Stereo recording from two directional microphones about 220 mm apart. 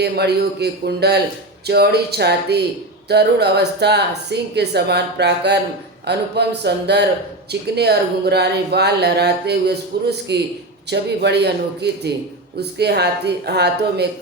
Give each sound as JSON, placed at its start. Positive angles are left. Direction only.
{"t": 0.0, "sound": "speech", "side_deg": -50}